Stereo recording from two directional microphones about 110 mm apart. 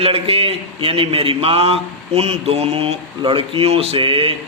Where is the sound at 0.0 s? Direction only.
60° right (ahead or behind).